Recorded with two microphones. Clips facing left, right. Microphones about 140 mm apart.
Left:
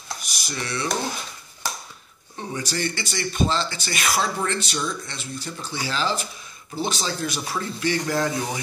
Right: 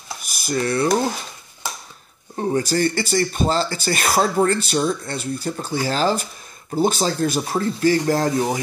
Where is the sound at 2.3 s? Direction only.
45° right (ahead or behind).